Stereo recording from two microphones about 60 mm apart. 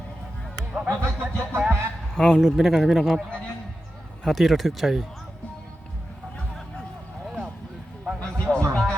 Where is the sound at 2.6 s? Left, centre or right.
Centre.